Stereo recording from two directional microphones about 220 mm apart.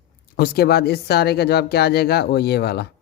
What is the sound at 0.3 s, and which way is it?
Speech, 45° left (ahead or behind).